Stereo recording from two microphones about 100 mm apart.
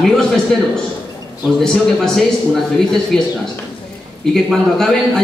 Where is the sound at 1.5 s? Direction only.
5° left (ahead or behind).